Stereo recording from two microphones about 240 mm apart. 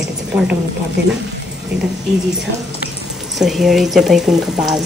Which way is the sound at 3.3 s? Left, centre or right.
Centre.